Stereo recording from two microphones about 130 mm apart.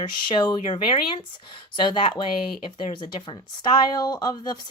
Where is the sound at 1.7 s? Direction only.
40° left (ahead or behind).